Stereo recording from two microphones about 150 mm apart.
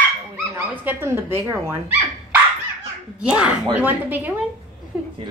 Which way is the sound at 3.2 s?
5° right (ahead or behind).